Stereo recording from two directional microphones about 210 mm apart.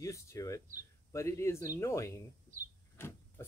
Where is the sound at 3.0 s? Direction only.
10° left (ahead or behind).